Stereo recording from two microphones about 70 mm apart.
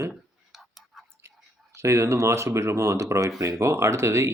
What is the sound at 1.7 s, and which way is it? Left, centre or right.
Speech, right.